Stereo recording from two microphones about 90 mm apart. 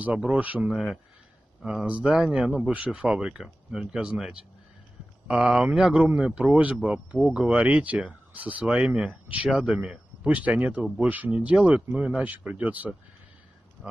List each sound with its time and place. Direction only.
0.0 s speech: 10° right (ahead or behind)
2.1 s speech: 5° right (ahead or behind)